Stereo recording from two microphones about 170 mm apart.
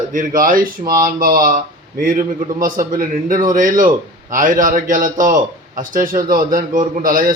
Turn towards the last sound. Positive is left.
turn(degrees=-55)  # may be behind; listen again after turning